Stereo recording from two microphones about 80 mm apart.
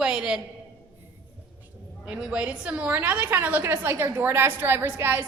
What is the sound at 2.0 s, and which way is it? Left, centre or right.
A woman's voice, centre.